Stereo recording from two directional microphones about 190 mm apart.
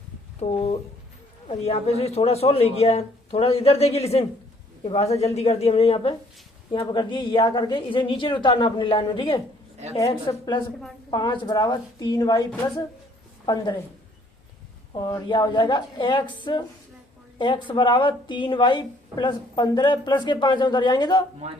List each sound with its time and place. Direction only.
0.3 s a woman's voice: 35° left (ahead or behind)
13.4 s a woman's voice: 20° left (ahead or behind)
14.9 s a woman's voice: 20° left (ahead or behind)